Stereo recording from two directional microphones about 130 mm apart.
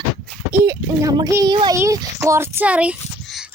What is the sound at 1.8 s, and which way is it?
Speech, 20° right (ahead or behind).